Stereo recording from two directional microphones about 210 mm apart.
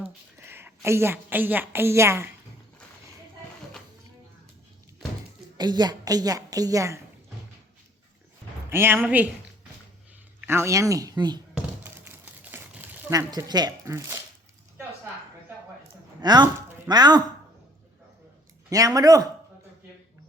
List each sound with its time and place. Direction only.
0.0 s a woman's voice: 10° right (ahead or behind)
5.5 s a woman's voice: 20° right (ahead or behind)
8.7 s a woman's voice: 10° right (ahead or behind)
10.4 s a woman's voice: 10° right (ahead or behind)
11.5 s crumpling: 10° right (ahead or behind)
16.2 s speech: 20° right (ahead or behind)
18.7 s a woman's voice: 15° right (ahead or behind)